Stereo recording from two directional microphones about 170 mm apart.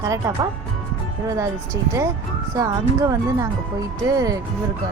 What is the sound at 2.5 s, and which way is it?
Speech, 20° right (ahead or behind).